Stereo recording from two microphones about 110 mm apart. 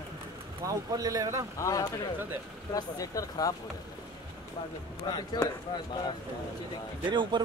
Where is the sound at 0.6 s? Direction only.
35° right (ahead or behind).